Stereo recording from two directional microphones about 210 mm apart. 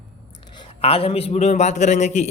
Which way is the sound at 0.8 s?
25° left (ahead or behind).